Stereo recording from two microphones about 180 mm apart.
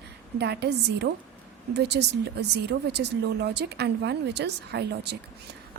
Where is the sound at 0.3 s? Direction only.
65° right (ahead or behind).